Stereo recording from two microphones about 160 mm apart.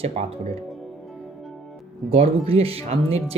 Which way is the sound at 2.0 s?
35° right (ahead or behind).